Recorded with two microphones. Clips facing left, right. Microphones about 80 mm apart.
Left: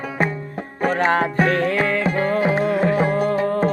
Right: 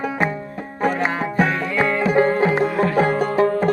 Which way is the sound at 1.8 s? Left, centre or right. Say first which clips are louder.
Right 3 dB; right.